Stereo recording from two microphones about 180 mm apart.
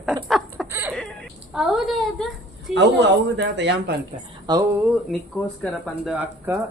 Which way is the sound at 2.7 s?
75° right (ahead or behind).